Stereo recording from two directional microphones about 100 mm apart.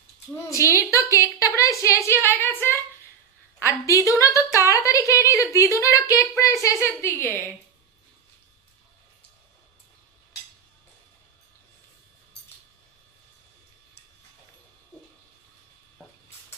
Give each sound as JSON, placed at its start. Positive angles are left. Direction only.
{"t": 0.5, "sound": "a woman's voice", "side_deg": 30}